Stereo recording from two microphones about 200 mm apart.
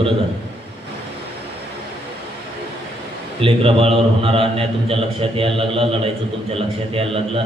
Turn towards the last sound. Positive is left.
turn(degrees=-30)  # may be behind; listen again after turning